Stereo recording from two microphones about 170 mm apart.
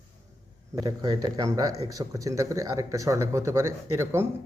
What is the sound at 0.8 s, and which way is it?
Speech, 20° right (ahead or behind).